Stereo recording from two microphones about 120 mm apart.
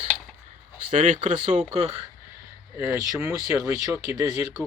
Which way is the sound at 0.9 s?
90° right.